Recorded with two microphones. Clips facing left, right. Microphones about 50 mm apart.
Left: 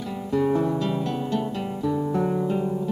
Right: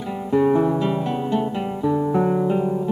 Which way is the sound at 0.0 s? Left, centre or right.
Centre.